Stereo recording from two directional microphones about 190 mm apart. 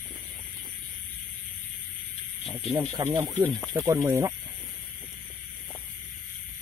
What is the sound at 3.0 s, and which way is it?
Speech, 20° right (ahead or behind).